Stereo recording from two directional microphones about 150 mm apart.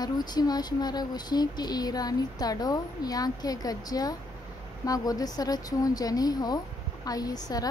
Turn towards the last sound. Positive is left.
turn(degrees=25)  # may be behind; listen again after turning